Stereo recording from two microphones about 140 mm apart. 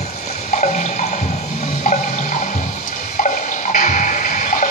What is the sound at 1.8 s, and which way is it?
Toilet flush, 60° left (ahead or behind).